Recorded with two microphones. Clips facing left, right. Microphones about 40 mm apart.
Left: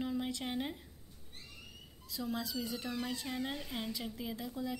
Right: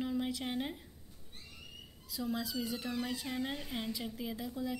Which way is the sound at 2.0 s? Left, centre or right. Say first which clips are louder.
Right 1 dB; centre.